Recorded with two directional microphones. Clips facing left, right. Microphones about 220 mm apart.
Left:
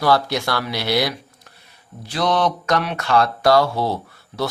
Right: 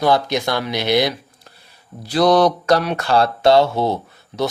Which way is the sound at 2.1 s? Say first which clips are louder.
Right 6 dB; 35° right (ahead or behind).